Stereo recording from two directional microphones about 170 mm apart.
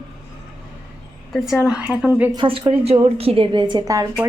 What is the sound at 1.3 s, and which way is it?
Speech, 5° right (ahead or behind).